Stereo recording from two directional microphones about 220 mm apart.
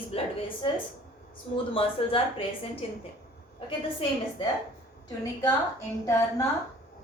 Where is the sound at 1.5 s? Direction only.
25° left (ahead or behind).